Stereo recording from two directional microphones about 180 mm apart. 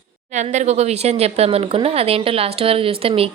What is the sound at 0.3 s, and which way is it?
Speech, 40° right (ahead or behind).